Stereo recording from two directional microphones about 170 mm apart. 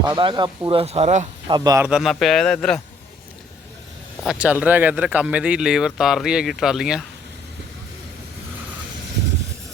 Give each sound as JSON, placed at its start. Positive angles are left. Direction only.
{"t": 0.0, "sound": "speech", "side_deg": -25}
{"t": 1.5, "sound": "a man's voice", "side_deg": -25}
{"t": 1.8, "sound": "speech", "side_deg": 0}
{"t": 4.3, "sound": "speech", "side_deg": -10}